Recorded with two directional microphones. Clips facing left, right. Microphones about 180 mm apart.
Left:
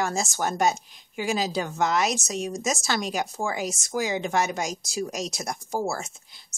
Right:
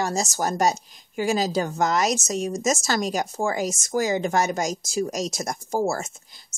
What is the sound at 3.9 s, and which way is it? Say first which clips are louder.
Speech: right 3 dB; 40° right (ahead or behind).